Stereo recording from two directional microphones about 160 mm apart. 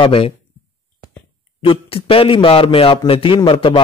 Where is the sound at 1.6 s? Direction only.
35° left (ahead or behind).